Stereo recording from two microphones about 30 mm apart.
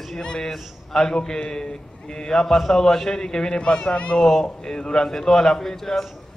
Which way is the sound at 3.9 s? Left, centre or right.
Left.